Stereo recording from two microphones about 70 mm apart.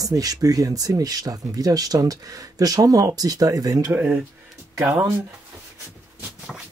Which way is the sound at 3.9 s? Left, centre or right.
Right.